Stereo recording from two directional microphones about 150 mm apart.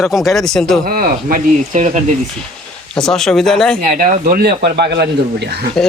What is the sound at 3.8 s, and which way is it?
Speech, 60° right (ahead or behind).